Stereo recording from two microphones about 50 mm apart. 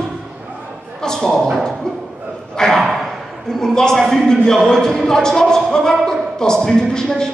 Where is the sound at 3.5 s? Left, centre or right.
Centre.